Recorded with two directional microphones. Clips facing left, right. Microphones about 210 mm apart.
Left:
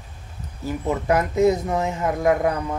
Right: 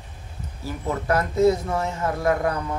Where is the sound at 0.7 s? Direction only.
15° left (ahead or behind).